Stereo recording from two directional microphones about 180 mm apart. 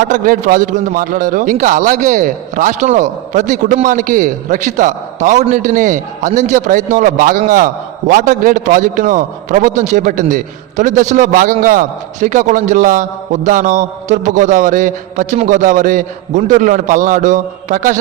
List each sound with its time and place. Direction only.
0.0 s a man's voice: 50° right (ahead or behind)